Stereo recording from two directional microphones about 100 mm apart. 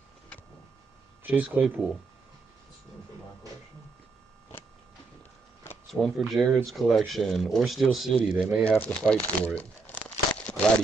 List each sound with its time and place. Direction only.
1.2 s speech: 15° right (ahead or behind)
5.9 s speech: 5° left (ahead or behind)
8.6 s speech: 15° left (ahead or behind)
10.3 s crumpling: 10° left (ahead or behind)